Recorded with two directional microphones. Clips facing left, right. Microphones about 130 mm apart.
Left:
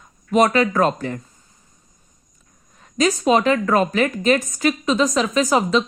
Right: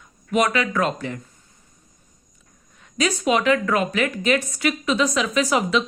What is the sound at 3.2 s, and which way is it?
A woman's voice, 35° left (ahead or behind).